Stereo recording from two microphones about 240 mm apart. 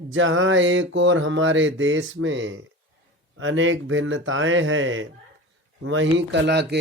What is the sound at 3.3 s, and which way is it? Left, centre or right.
Speech, right.